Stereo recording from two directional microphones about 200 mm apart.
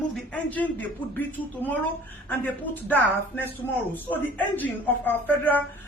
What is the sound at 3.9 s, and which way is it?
Speech, 10° left (ahead or behind).